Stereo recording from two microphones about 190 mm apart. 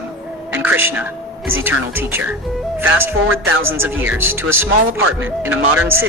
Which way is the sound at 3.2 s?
90° right.